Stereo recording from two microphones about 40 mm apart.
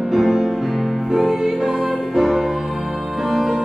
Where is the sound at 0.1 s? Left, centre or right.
Centre.